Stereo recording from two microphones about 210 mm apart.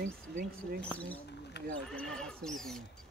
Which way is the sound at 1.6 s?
50° left (ahead or behind).